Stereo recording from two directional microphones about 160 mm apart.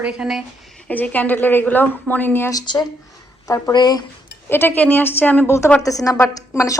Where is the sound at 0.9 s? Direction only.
10° left (ahead or behind); by 4.0 s 25° left (ahead or behind).